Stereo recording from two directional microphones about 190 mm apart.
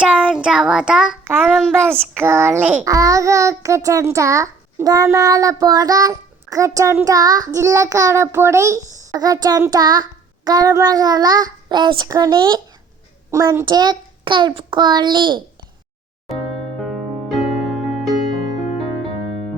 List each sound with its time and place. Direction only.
0.0 s child singing: 5° right (ahead or behind)
2.1 s child singing: 10° right (ahead or behind)
13.3 s a child's voice: 15° right (ahead or behind)
16.8 s music: centre (ahead or behind)